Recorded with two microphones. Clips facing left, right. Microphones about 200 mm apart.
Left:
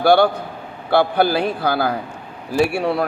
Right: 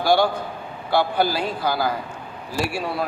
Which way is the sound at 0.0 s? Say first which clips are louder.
Left 5 dB; 60° left (ahead or behind).